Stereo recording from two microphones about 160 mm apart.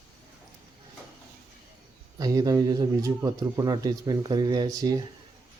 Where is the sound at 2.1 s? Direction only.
20° right (ahead or behind).